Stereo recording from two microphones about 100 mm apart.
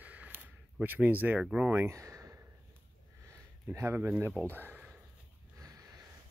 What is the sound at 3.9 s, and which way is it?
Speech, 15° right (ahead or behind).